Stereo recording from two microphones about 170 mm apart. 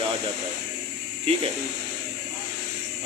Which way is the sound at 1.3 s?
35° right (ahead or behind).